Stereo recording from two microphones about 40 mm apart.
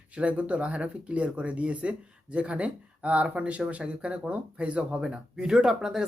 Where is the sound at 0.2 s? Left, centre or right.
Right.